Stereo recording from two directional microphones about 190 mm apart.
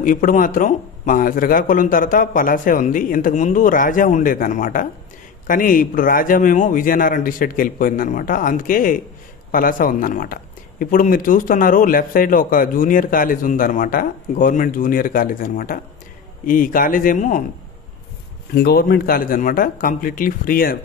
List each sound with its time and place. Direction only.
0.0 s speech: 45° left (ahead or behind)
18.5 s speech: 55° left (ahead or behind)